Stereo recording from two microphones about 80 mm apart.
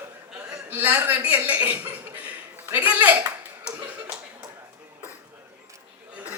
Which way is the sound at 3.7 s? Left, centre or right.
Centre.